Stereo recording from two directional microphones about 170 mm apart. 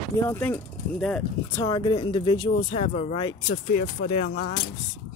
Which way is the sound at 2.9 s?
40° left (ahead or behind).